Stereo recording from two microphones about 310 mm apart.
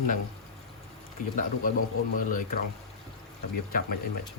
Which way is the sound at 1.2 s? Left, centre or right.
Left.